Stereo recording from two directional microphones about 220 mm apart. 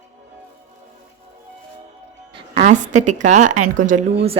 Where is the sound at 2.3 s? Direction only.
30° right (ahead or behind).